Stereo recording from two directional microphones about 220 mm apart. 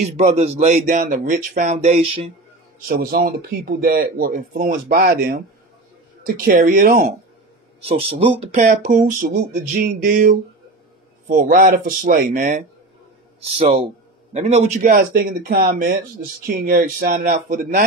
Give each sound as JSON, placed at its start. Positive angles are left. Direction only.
{"t": 0.3, "sound": "speech", "side_deg": -30}
{"t": 2.9, "sound": "speech", "side_deg": -40}
{"t": 13.6, "sound": "speech", "side_deg": -25}